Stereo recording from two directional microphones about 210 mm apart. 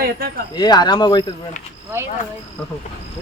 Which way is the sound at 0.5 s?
20° left (ahead or behind).